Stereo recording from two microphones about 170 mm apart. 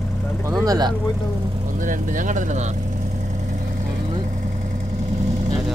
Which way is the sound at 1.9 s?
50° right (ahead or behind).